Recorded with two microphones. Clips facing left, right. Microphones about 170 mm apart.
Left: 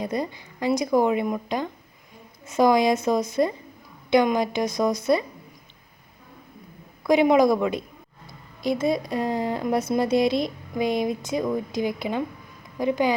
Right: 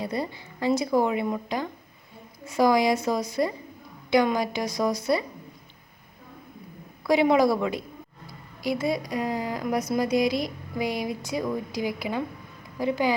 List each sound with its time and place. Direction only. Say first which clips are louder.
0.0 s a woman's voice: left 2 dB; 20° left (ahead or behind)
7.1 s a woman's voice: left 3 dB; 20° left (ahead or behind)